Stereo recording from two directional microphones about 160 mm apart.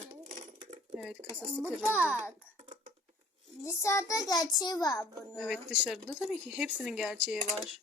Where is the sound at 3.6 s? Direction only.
15° left (ahead or behind).